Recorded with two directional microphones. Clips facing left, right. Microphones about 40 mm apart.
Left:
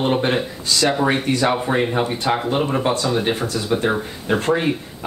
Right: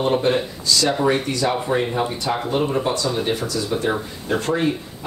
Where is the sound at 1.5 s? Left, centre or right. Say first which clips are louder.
Left 2 dB; left.